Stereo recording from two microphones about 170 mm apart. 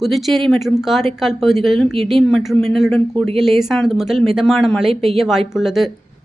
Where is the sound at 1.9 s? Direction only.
35° right (ahead or behind).